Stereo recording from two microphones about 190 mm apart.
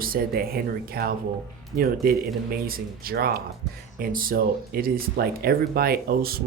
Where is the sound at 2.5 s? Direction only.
50° right (ahead or behind).